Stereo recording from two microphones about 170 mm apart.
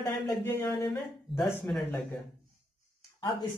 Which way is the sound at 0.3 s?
15° left (ahead or behind).